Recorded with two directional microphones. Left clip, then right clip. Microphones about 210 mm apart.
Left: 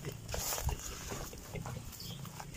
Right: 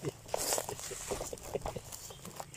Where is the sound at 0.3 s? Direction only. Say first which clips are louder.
Right 5 dB; 25° right (ahead or behind).